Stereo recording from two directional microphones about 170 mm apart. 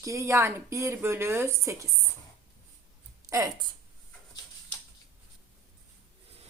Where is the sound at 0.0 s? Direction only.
20° right (ahead or behind).